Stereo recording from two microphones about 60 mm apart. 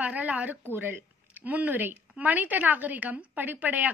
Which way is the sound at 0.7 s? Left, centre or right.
Right.